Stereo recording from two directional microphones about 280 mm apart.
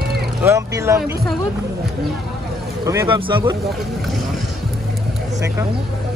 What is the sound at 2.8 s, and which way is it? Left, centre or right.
Speech, centre.